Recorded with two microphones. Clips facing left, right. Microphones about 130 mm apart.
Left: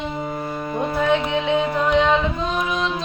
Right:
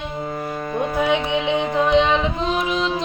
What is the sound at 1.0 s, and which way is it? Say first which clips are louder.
Music: left 1 dB; 15° right (ahead or behind).